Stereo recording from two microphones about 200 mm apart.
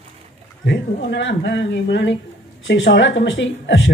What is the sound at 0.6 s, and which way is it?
A woman's voice, 60° left (ahead or behind).